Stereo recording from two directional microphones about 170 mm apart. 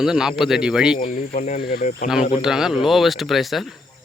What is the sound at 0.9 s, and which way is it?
Speech, 40° left (ahead or behind).